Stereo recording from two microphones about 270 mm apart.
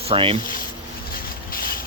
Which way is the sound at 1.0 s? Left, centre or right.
Left.